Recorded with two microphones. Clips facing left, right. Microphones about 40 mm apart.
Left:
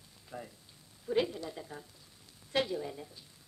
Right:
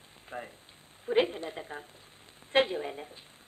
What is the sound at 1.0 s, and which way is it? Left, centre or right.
Speech, right.